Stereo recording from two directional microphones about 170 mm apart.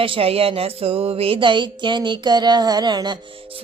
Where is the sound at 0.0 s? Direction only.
35° right (ahead or behind).